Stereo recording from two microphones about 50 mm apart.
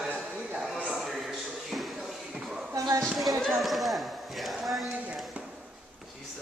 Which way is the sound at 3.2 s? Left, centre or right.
Centre.